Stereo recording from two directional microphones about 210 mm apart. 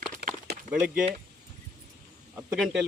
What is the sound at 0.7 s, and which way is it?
Speech, 5° right (ahead or behind).